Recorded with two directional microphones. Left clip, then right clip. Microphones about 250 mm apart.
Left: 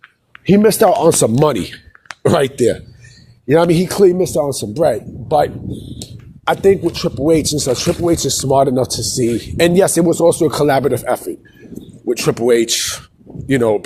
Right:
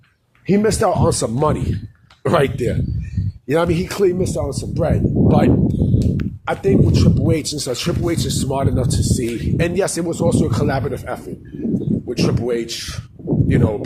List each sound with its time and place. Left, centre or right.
0.4 s speech: left
3.2 s speech: centre
6.9 s speech: centre
8.2 s speech: centre
9.6 s speech: left